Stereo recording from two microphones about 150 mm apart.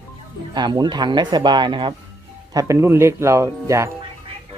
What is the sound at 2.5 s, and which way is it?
Speech, 20° right (ahead or behind).